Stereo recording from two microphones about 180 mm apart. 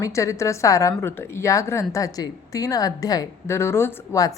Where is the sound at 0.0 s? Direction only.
15° left (ahead or behind).